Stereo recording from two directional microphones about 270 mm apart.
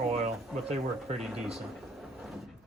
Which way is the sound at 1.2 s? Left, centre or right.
Centre.